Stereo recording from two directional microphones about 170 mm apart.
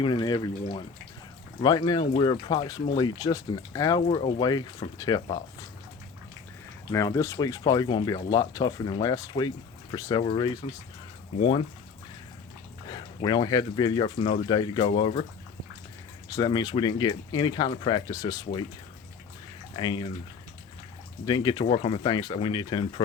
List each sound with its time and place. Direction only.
0.0 s speech: 25° left (ahead or behind)
1.6 s speech: 25° left (ahead or behind)
4.0 s speech: 35° left (ahead or behind)
6.9 s speech: 20° left (ahead or behind)
12.9 s speech: 25° left (ahead or behind)
16.4 s speech: 25° left (ahead or behind)
19.7 s speech: 30° left (ahead or behind)
21.2 s speech: 25° left (ahead or behind)